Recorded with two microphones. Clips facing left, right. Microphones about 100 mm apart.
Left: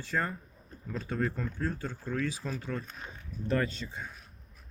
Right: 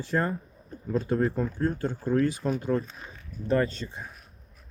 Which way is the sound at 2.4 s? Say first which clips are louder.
Right 9 dB; 40° right (ahead or behind).